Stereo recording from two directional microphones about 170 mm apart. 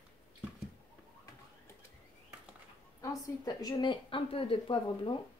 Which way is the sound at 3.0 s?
20° left (ahead or behind).